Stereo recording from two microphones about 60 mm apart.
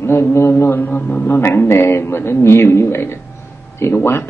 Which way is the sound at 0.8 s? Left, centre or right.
Left.